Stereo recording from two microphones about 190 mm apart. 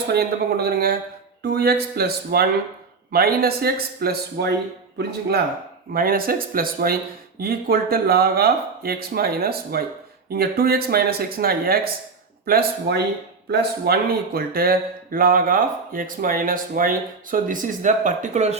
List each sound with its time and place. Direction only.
0.1 s speech: 55° right (ahead or behind)
5.9 s speech: 50° right (ahead or behind)